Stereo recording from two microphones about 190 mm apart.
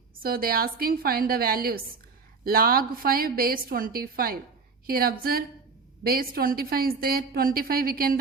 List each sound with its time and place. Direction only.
0.2 s a woman's voice: 50° right (ahead or behind)